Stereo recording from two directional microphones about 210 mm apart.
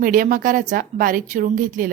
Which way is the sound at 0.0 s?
40° right (ahead or behind).